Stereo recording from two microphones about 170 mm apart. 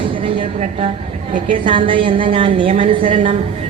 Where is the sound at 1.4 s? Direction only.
30° right (ahead or behind).